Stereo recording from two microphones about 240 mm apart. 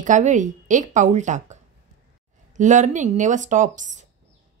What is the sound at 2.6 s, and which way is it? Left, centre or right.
Speech, right.